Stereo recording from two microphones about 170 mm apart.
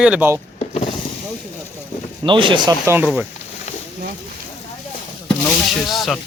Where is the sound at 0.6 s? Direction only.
40° left (ahead or behind).